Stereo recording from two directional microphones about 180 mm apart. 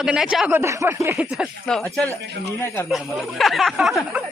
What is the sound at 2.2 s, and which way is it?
Speech, 65° right (ahead or behind).